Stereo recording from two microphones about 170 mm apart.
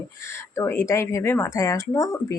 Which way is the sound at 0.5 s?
15° left (ahead or behind).